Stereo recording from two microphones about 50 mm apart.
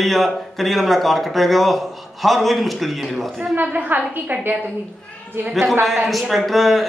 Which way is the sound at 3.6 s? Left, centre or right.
Right.